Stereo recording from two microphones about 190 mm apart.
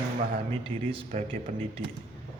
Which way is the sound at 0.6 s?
30° right (ahead or behind).